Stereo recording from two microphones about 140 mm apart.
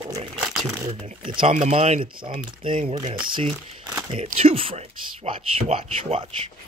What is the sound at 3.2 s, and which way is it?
Speech, 35° right (ahead or behind).